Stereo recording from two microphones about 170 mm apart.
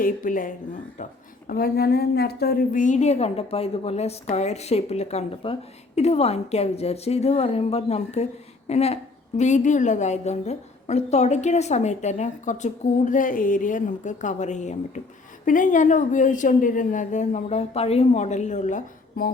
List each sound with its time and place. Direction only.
0.0 s a woman's voice: 55° left (ahead or behind)
1.5 s a woman's voice: 65° left (ahead or behind)